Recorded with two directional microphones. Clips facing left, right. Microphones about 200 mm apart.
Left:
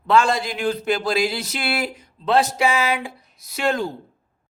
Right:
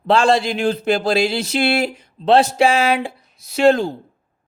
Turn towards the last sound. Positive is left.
turn(degrees=-25)  # may be behind; listen again after turning